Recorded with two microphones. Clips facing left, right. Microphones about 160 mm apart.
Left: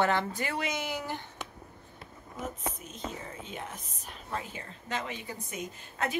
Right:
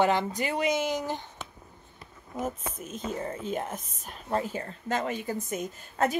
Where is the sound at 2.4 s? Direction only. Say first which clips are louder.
Right 2 dB; 50° right (ahead or behind).